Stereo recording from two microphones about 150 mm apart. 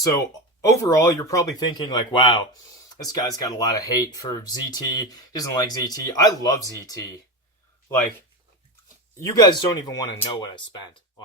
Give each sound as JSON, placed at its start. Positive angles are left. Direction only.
{"t": 0.0, "sound": "speech", "side_deg": 25}
{"t": 9.1, "sound": "speech", "side_deg": 20}